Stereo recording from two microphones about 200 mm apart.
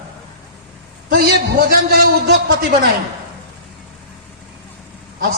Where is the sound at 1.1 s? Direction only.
50° right (ahead or behind).